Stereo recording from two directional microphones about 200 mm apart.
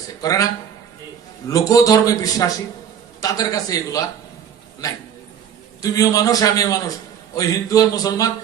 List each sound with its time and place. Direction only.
0.2 s a man's voice: 15° left (ahead or behind)
1.5 s a man's voice: 15° left (ahead or behind)
5.8 s a man's voice: 15° left (ahead or behind)